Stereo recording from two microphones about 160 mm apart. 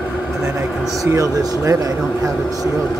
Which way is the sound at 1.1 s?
20° right (ahead or behind).